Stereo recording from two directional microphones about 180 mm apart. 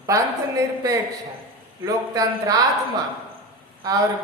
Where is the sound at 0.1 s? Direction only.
20° right (ahead or behind).